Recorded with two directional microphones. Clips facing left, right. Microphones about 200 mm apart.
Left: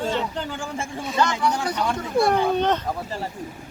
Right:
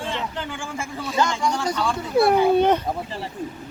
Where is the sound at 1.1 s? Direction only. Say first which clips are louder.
Even; 10° right (ahead or behind).